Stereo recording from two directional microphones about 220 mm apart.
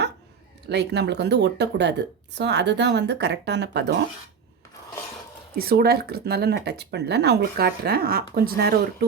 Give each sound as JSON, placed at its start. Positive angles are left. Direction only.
{"t": 0.7, "sound": "a woman's voice", "side_deg": -50}
{"t": 5.5, "sound": "a woman's voice", "side_deg": -45}